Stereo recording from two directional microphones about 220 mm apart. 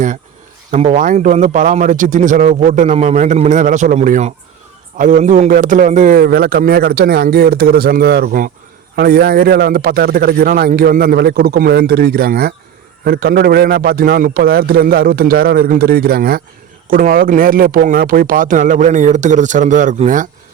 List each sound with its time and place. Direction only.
0.7 s a man's voice: 35° right (ahead or behind)